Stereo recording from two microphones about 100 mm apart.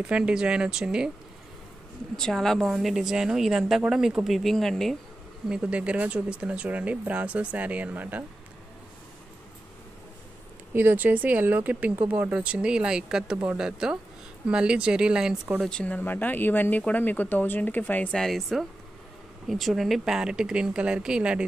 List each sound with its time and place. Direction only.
0.0 s speech: 10° right (ahead or behind)
2.1 s a woman's voice: 5° left (ahead or behind)
5.5 s speech: 10° right (ahead or behind)
10.7 s speech: 20° right (ahead or behind)
15.6 s speech: 10° left (ahead or behind)
18.2 s a woman's voice: centre (ahead or behind)